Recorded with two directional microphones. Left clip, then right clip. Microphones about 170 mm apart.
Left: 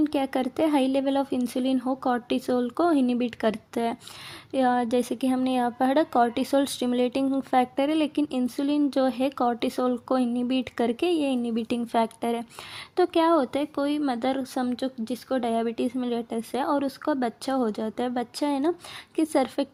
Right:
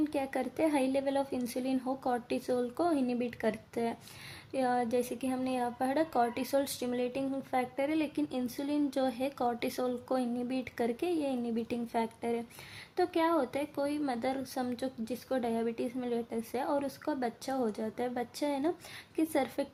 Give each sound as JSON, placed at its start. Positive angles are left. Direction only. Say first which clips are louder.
{"t": 0.0, "sound": "speech", "louder": "left 8 dB", "side_deg": 40}